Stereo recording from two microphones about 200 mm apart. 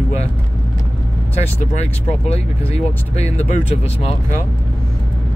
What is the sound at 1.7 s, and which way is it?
Speech, 30° left (ahead or behind).